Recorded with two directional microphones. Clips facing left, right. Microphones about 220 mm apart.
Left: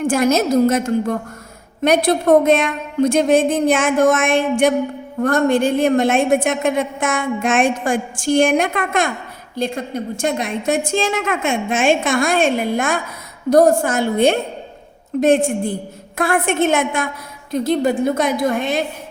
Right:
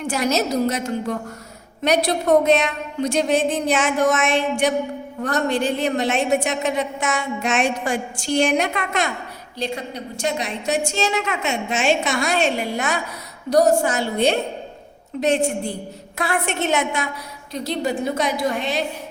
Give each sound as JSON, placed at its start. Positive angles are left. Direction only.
{"t": 0.0, "sound": "a woman's voice", "side_deg": 50}